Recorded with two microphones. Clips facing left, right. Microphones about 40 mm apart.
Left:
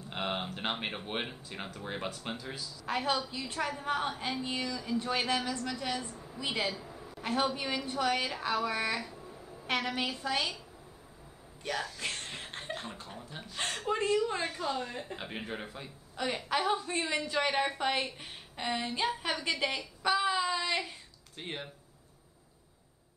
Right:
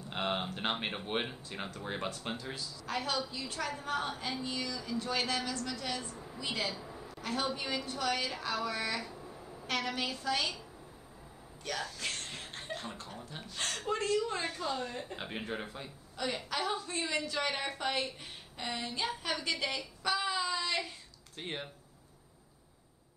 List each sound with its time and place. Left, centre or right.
0.1 s speech: centre
2.9 s a woman's voice: left
6.7 s a sound: centre
7.1 s a woman's voice: left
9.0 s a sound: centre
9.7 s a woman's voice: left
11.6 s speech: centre
12.8 s a woman's voice: centre
16.2 s a woman's voice: centre
19.8 s child singing: centre
21.4 s speech: centre